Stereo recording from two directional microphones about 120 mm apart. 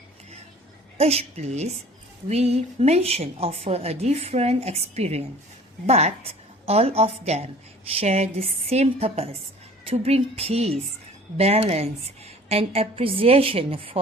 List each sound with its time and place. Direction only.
0.9 s a woman's voice: 60° right (ahead or behind)